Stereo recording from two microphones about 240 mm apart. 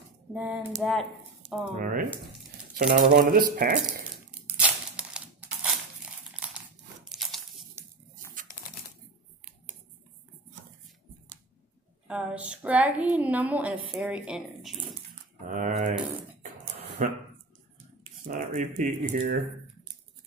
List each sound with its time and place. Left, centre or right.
0.3 s a woman's voice: centre
1.4 s squish: right
1.8 s speech: right
3.8 s a sound: centre
6.4 s crumpling: centre
7.1 s a sound: centre
8.5 s typewriter: left
12.1 s a woman's voice: centre
15.4 s speech: right
17.0 s speech: right
18.2 s speech: right